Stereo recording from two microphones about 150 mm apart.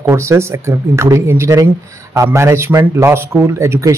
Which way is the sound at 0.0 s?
20° right (ahead or behind).